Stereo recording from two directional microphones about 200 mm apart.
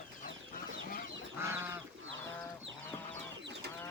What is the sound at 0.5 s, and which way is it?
Chicken, 45° left (ahead or behind).